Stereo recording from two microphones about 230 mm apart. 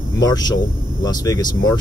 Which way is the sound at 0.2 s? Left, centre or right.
Centre.